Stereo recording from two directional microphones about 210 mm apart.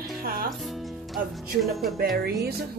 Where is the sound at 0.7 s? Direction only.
Centre (ahead or behind).